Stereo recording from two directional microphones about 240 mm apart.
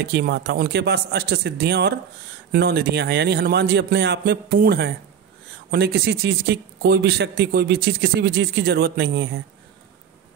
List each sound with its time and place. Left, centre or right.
0.0 s speech: right